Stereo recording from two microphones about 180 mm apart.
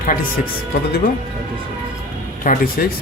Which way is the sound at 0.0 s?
50° left (ahead or behind).